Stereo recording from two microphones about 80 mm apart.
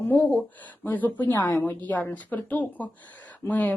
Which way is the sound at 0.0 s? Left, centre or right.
Left.